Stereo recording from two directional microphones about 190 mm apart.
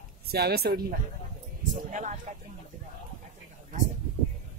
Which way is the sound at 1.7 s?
40° right (ahead or behind).